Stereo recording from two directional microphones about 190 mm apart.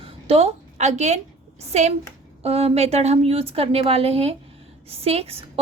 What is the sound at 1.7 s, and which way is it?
A woman's voice, 35° right (ahead or behind).